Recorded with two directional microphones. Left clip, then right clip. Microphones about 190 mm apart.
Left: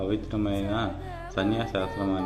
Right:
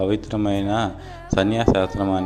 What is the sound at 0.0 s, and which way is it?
Speech, 45° right (ahead or behind).